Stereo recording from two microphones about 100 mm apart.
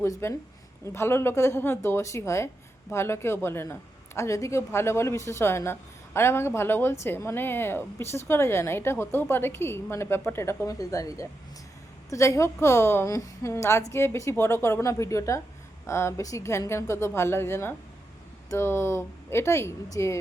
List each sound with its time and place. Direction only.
0.0 s a woman's voice: 25° left (ahead or behind)